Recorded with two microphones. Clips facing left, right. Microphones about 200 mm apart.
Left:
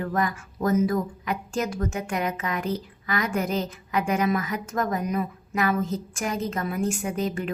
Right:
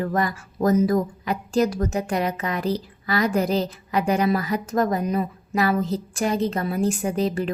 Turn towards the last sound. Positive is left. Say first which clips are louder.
# right 4 dB
turn(degrees=-30)  # may be behind; listen again after turning